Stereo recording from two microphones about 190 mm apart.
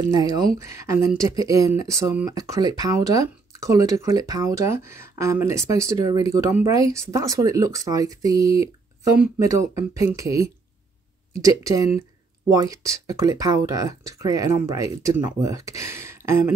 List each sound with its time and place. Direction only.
0.0 s speech: 20° right (ahead or behind)